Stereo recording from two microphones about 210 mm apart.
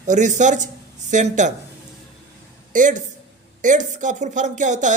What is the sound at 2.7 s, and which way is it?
A woman's voice, 35° right (ahead or behind).